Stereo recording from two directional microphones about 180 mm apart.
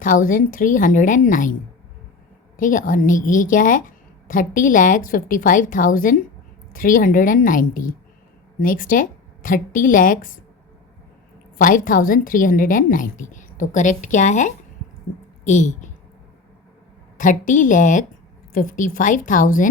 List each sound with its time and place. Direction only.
0.0 s a woman's voice: 50° left (ahead or behind)
2.6 s a woman's voice: 50° left (ahead or behind)
11.5 s a woman's voice: 50° left (ahead or behind)
17.2 s a woman's voice: 45° left (ahead or behind)